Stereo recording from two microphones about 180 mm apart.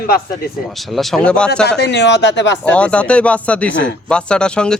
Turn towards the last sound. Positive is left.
turn(degrees=5)  # may be behind; listen again after turning